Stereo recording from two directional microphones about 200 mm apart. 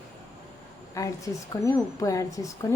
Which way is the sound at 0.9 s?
15° left (ahead or behind).